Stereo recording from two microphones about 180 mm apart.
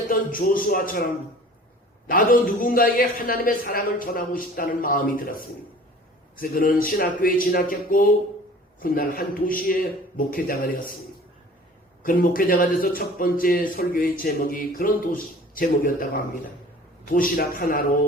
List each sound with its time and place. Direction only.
0.1 s speech: 50° left (ahead or behind)
2.0 s speech: 50° left (ahead or behind)
12.0 s speech: 50° left (ahead or behind)